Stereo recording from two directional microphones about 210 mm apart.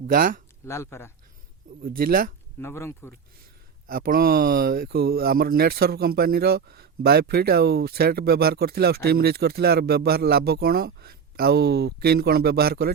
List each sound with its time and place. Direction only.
0.1 s speech: 40° right (ahead or behind)
0.6 s speech: 10° left (ahead or behind)
1.8 s speech: 45° right (ahead or behind)
2.6 s speech: 10° left (ahead or behind)
3.8 s speech: 45° right (ahead or behind)